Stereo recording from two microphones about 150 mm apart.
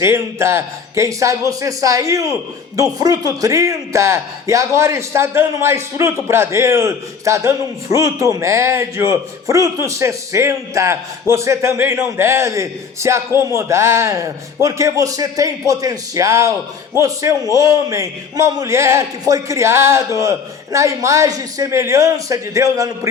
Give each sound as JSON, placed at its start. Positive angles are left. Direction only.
{"t": 0.0, "sound": "a man's voice", "side_deg": -15}